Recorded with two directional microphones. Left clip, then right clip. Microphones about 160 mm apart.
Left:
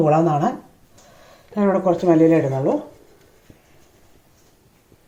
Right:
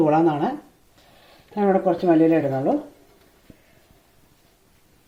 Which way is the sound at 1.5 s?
45° right (ahead or behind).